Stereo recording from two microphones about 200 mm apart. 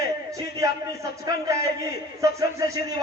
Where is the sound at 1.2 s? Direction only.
15° right (ahead or behind).